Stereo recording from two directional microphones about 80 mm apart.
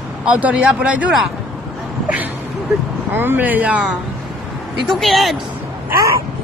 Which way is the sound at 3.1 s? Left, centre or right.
Right.